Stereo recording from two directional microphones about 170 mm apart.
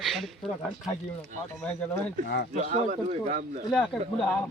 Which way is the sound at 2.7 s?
45° right (ahead or behind).